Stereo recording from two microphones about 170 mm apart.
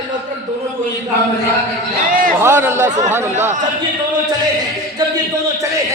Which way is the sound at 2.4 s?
15° right (ahead or behind).